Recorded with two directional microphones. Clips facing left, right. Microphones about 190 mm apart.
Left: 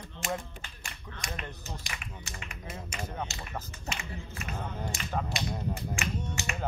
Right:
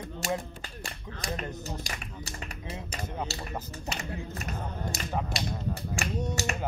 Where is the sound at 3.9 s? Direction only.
40° right (ahead or behind).